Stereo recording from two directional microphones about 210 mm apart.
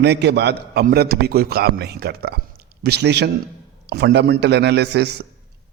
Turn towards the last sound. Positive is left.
turn(degrees=-50)  # may be behind; listen again after turning